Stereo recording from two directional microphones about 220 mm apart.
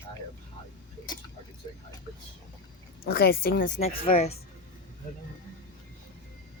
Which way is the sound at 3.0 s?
45° left (ahead or behind).